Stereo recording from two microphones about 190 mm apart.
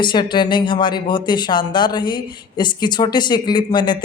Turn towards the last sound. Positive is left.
turn(degrees=25)  # may be behind; listen again after turning